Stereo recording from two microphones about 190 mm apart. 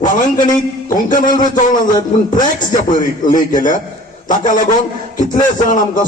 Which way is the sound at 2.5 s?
45° left (ahead or behind).